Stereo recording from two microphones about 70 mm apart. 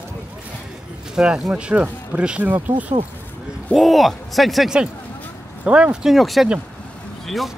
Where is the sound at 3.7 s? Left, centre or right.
Centre.